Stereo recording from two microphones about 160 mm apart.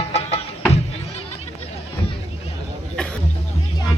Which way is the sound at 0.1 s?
40° left (ahead or behind).